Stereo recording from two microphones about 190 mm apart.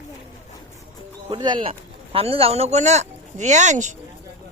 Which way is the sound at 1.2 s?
25° right (ahead or behind).